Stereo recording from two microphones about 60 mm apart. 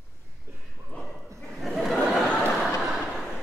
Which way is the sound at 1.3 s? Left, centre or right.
Centre.